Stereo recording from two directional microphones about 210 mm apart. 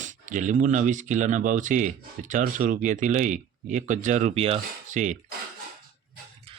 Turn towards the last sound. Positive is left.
turn(degrees=-35)  # may be behind; listen again after turning